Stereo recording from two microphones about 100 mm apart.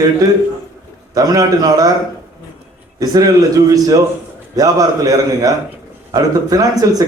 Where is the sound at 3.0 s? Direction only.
40° right (ahead or behind).